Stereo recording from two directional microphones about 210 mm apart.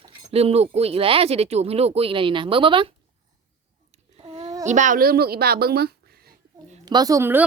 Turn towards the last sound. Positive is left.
turn(degrees=-10)  # may be behind; listen again after turning